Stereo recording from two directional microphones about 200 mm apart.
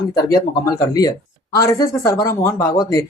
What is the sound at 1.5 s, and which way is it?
Speech, 15° left (ahead or behind).